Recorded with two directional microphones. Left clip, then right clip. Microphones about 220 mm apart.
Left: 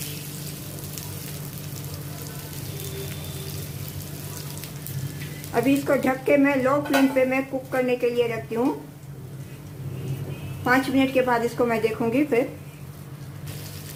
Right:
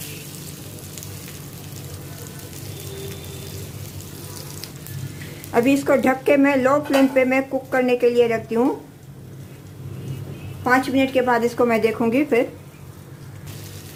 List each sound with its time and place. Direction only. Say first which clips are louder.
5.5 s a woman's voice: right 4 dB; 30° right (ahead or behind)
10.6 s a woman's voice: right 3 dB; 25° right (ahead or behind)